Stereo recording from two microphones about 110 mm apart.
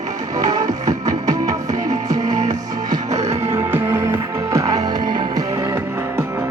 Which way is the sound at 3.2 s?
25° right (ahead or behind).